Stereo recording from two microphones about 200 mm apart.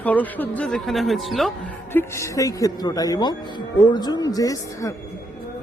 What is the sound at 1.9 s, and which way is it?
A man's voice, 15° left (ahead or behind).